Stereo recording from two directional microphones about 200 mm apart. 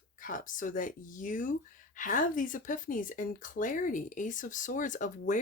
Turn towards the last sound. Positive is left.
turn(degrees=40)  # may be behind; listen again after turning